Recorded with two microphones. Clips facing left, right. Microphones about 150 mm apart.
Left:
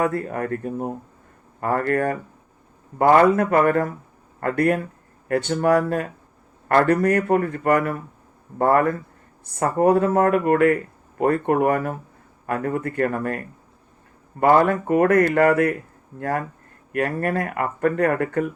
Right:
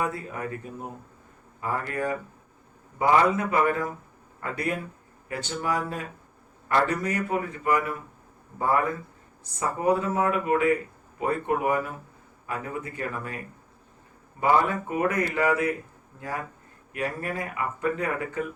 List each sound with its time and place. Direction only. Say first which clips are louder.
0.0 s speech: left 7 dB; 55° left (ahead or behind)